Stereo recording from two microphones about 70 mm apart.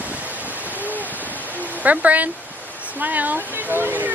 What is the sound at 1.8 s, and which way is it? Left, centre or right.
Speech, right.